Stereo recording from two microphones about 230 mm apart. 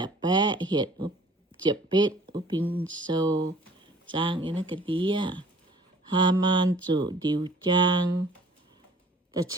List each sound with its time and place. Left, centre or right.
0.0 s speech: centre
2.8 s a sound: centre
3.1 s speech: centre